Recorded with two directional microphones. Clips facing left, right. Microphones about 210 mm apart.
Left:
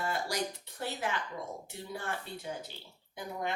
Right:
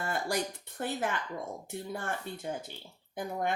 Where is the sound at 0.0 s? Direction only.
50° right (ahead or behind).